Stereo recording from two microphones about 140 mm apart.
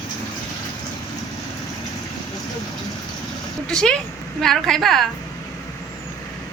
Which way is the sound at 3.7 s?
5° left (ahead or behind).